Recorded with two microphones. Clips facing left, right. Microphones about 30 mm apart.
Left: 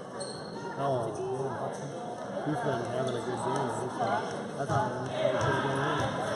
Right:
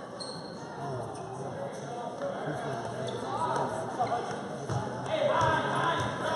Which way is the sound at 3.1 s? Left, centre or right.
Centre.